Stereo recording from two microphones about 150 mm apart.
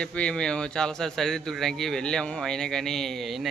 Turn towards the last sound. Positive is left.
turn(degrees=0)  # may be behind; listen again after turning